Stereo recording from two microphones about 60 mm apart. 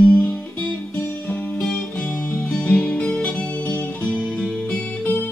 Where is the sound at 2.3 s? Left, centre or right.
Centre.